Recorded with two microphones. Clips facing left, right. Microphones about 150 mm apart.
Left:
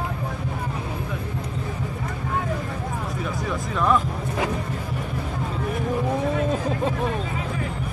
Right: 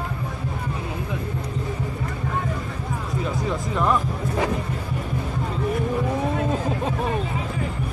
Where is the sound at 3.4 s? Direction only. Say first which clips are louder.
Left 1 dB; 15° right (ahead or behind).